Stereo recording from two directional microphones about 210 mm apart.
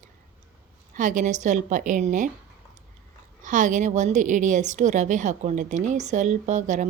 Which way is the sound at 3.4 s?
35° right (ahead or behind).